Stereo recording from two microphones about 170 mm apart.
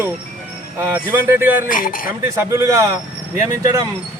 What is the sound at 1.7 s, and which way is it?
Speech, 55° left (ahead or behind).